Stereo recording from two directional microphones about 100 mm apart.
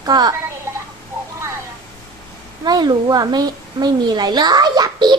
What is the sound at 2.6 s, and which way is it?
A woman's voice, 45° right (ahead or behind).